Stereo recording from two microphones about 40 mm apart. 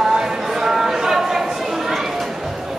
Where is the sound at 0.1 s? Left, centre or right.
Centre.